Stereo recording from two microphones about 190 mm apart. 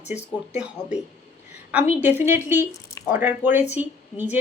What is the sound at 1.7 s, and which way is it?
A woman's voice, 10° right (ahead or behind).